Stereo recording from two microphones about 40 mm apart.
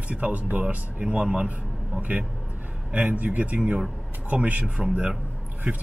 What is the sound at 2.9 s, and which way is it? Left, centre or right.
Speech, right.